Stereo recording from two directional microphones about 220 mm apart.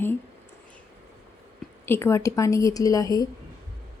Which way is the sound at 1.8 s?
10° left (ahead or behind).